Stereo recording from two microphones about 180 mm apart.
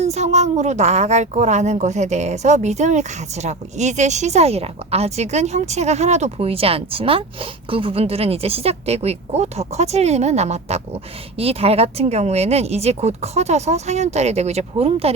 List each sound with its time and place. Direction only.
0.0 s a woman's voice: 40° right (ahead or behind)